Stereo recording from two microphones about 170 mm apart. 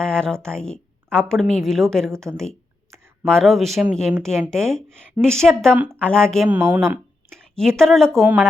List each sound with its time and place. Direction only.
0.0 s a woman's voice: 5° left (ahead or behind)
6.5 s speech: 10° right (ahead or behind)
7.3 s a sound: 5° left (ahead or behind)
7.8 s a woman's voice: 5° left (ahead or behind)
8.2 s speech: 10° right (ahead or behind)